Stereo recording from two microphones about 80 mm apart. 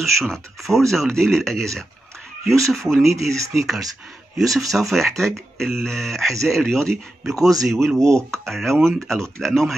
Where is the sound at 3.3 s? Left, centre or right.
Right.